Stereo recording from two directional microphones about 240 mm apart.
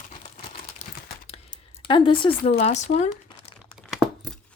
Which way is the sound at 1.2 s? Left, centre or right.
Left.